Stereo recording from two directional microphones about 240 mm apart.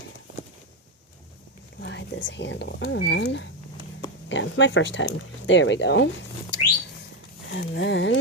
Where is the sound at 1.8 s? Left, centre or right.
Left.